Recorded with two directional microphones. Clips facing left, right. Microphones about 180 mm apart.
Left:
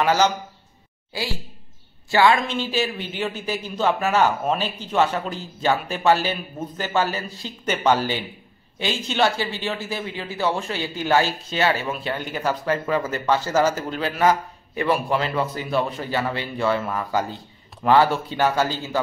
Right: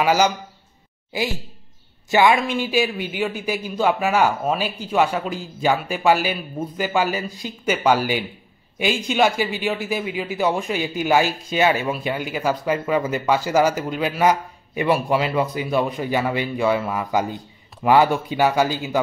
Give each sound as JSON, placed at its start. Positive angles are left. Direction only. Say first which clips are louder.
{"t": 0.0, "sound": "a woman's voice", "louder": "right 1 dB", "side_deg": -10}